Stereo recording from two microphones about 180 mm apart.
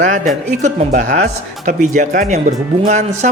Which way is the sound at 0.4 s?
40° right (ahead or behind).